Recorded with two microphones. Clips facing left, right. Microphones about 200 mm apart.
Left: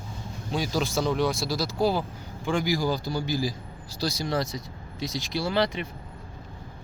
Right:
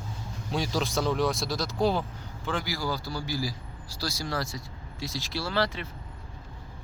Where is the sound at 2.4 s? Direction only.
15° left (ahead or behind).